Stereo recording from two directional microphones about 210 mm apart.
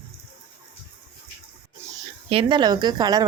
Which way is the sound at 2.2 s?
25° right (ahead or behind).